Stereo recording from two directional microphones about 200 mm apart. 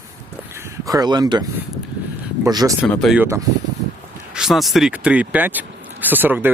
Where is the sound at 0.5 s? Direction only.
15° right (ahead or behind).